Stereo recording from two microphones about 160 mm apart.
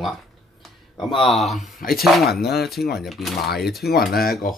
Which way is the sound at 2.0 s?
Centre (ahead or behind).